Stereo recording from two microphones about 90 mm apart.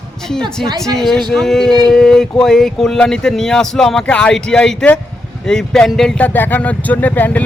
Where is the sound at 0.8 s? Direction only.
5° left (ahead or behind).